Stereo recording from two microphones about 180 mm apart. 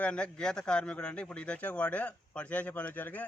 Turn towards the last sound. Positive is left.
turn(degrees=10)  # may be behind; listen again after turning